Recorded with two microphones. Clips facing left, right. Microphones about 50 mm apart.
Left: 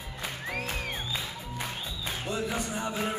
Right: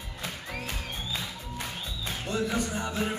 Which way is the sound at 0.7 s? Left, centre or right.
Centre.